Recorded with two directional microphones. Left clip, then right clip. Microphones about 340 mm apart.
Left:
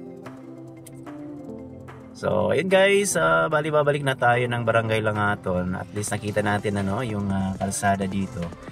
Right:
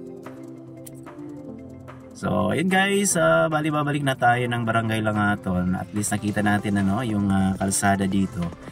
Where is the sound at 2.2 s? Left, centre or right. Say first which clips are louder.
Left 2 dB; centre.